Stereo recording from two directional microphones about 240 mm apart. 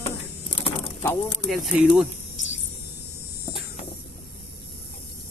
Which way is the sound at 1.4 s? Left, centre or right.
Centre.